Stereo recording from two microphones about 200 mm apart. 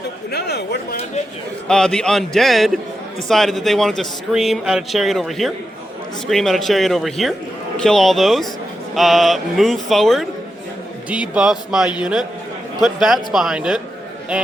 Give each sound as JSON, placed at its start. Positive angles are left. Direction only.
{"t": 0.3, "sound": "speech", "side_deg": 55}
{"t": 1.6, "sound": "speech", "side_deg": 5}